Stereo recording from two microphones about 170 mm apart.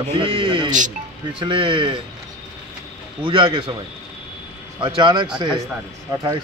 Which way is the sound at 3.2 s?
30° right (ahead or behind).